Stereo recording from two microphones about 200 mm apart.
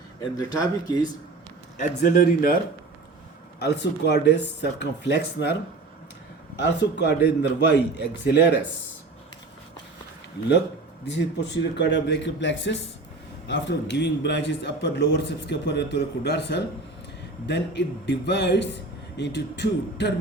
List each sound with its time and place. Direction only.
0.3 s speech: 20° left (ahead or behind)
2.0 s speech: 45° left (ahead or behind)
3.6 s a man's voice: 55° left (ahead or behind)
6.6 s a man's voice: 60° left (ahead or behind)
11.0 s a man's voice: 60° left (ahead or behind)